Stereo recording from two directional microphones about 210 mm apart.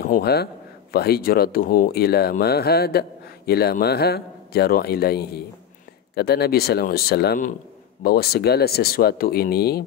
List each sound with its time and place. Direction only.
0.0 s a man's voice: 45° left (ahead or behind)